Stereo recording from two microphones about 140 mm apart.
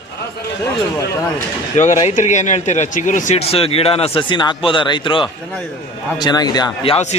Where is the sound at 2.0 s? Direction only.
55° left (ahead or behind).